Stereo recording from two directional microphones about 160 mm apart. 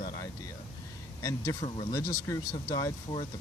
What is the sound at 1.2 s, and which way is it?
Speech, 20° left (ahead or behind).